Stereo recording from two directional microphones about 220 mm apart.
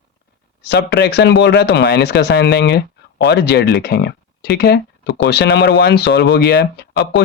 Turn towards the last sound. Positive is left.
turn(degrees=50)  # may be behind; listen again after turning